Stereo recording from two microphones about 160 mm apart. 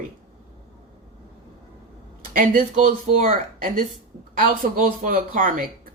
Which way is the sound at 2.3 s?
60° right (ahead or behind).